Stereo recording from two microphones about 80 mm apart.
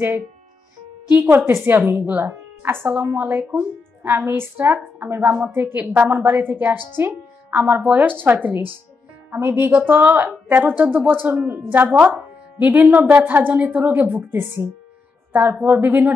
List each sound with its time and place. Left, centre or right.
1.3 s a woman's voice: right